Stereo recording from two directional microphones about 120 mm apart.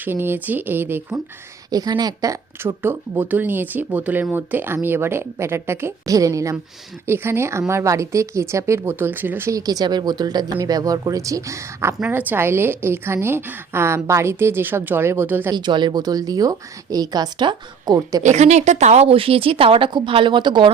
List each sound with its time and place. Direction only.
0.0 s speech: 20° right (ahead or behind)
1.7 s speech: 35° right (ahead or behind)
11.9 s speech: 15° right (ahead or behind)
15.5 s speech: 40° right (ahead or behind)
18.2 s speech: 75° right (ahead or behind); by 20.7 s 40° right (ahead or behind)